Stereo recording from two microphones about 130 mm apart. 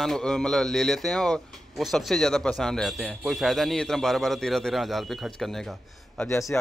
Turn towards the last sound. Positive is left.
turn(degrees=20)  # may be behind; listen again after turning